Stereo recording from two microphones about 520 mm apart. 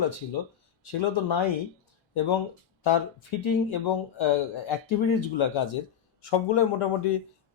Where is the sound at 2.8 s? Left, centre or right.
Left.